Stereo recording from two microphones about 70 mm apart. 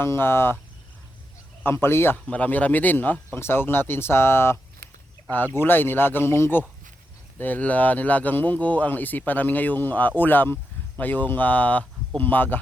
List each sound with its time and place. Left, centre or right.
0.0 s speech: left
1.6 s speech: left
2.2 s speech: centre; by 4.5 s left
5.5 s speech: left